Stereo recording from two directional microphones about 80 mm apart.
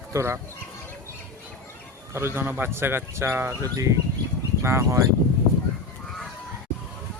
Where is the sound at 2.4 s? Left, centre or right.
Right.